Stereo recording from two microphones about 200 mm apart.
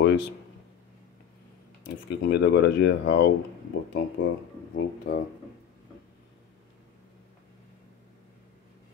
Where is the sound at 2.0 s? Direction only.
60° left (ahead or behind).